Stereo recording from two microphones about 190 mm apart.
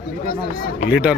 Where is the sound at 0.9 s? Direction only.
5° right (ahead or behind).